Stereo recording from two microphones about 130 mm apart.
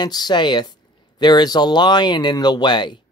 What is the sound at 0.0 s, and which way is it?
Speech, 35° left (ahead or behind).